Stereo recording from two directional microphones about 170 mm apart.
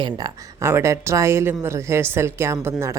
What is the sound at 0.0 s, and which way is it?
A woman's voice, 20° right (ahead or behind).